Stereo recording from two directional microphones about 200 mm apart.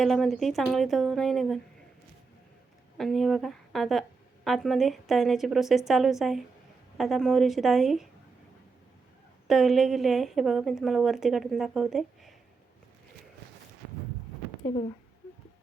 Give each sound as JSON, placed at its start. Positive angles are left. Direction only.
{"t": 0.0, "sound": "a woman's voice", "side_deg": 0}
{"t": 3.0, "sound": "a woman's voice", "side_deg": 0}
{"t": 9.5, "sound": "a woman's voice", "side_deg": 0}